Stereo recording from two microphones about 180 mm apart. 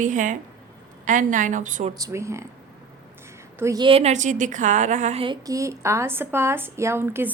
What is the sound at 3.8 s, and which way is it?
A woman's voice, 30° right (ahead or behind).